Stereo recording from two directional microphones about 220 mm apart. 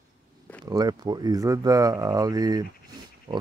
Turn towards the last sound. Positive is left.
turn(degrees=-25)  # may be behind; listen again after turning